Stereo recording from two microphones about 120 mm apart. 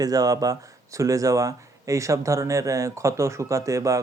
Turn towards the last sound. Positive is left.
turn(degrees=-25)  # may be behind; listen again after turning